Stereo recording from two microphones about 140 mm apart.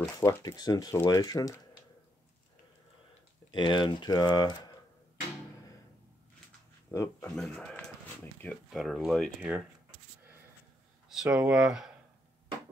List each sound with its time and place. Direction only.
0.2 s speech: 20° left (ahead or behind)
0.6 s speech: 30° left (ahead or behind)
3.5 s speech: 35° left (ahead or behind)
6.9 s speech: 20° left (ahead or behind)
7.2 s speech: 5° left (ahead or behind)
11.1 s speech: 5° right (ahead or behind)